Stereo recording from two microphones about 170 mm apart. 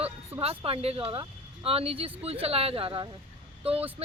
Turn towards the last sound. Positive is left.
turn(degrees=-35)  # may be behind; listen again after turning